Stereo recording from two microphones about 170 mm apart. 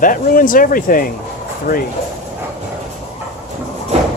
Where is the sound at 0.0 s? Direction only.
55° left (ahead or behind).